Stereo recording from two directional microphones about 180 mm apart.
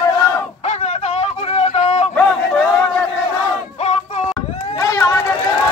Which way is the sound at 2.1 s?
5° left (ahead or behind).